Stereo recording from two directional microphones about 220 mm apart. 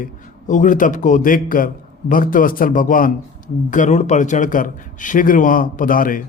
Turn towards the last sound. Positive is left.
turn(degrees=40)  # may be behind; listen again after turning